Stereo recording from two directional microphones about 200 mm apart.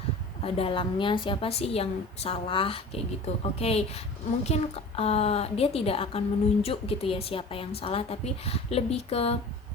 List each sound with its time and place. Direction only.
0.4 s a woman's voice: 30° left (ahead or behind)